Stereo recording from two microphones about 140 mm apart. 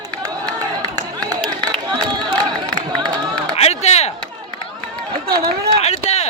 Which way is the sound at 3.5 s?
50° left (ahead or behind).